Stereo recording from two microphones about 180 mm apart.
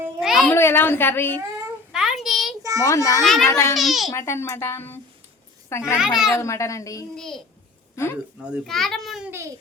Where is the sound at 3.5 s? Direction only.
15° left (ahead or behind).